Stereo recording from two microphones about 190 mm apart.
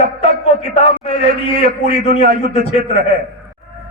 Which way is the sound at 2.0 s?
35° left (ahead or behind).